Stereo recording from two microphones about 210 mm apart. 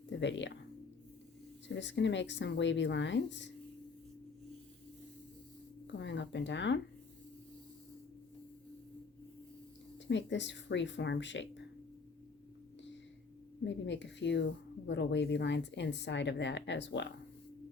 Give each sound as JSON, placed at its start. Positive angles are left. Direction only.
{"t": 0.1, "sound": "speech", "side_deg": 60}
{"t": 1.6, "sound": "a woman's voice", "side_deg": 60}
{"t": 5.9, "sound": "a woman's voice", "side_deg": 60}
{"t": 10.1, "sound": "a woman's voice", "side_deg": 60}
{"t": 13.7, "sound": "a woman's voice", "side_deg": 60}